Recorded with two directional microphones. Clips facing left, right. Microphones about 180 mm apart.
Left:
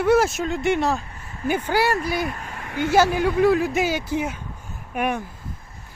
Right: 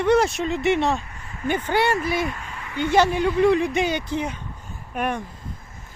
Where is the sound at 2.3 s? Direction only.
40° left (ahead or behind).